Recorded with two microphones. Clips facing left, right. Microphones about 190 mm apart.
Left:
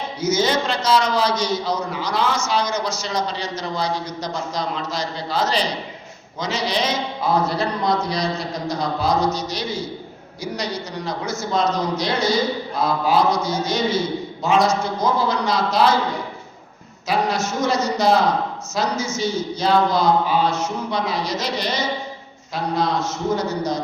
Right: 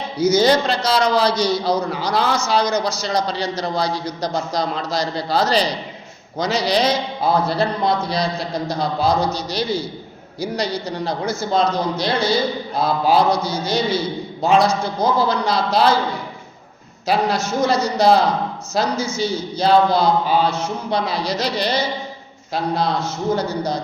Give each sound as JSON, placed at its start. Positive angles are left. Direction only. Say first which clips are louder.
{"t": 0.2, "sound": "a man's voice", "louder": "right 5 dB", "side_deg": -35}
{"t": 17.1, "sound": "a man's voice", "louder": "right 2 dB", "side_deg": -30}